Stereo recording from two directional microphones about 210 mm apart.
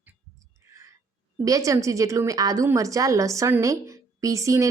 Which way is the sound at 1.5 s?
15° right (ahead or behind).